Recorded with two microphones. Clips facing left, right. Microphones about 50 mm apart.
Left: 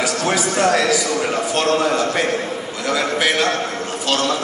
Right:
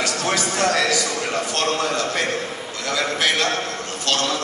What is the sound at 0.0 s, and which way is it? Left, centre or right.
A man's voice, centre.